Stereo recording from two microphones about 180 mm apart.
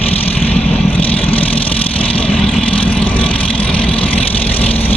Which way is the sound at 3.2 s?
30° left (ahead or behind).